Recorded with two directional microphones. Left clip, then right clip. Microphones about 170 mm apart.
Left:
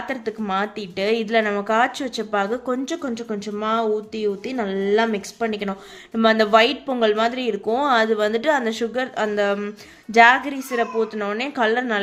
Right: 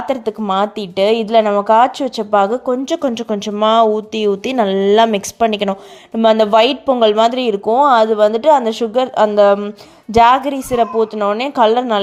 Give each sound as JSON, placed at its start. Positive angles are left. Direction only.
{"t": 0.0, "sound": "speech", "side_deg": -30}
{"t": 6.1, "sound": "a woman's voice", "side_deg": -30}